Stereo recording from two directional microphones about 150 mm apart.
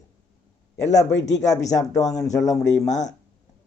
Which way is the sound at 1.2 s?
50° left (ahead or behind).